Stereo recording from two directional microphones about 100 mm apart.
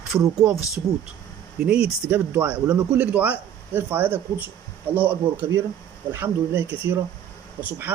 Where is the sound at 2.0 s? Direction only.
15° right (ahead or behind).